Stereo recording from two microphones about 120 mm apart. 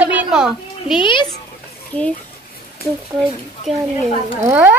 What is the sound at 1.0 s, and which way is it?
Speech, 40° left (ahead or behind).